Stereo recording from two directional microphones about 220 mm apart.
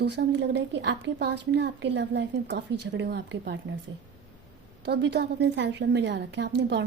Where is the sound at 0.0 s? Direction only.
50° right (ahead or behind).